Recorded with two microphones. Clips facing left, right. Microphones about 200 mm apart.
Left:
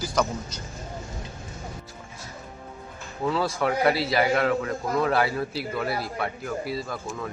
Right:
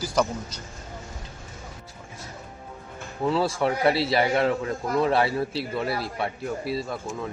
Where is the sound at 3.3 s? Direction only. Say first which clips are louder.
Right 1 dB; 30° right (ahead or behind).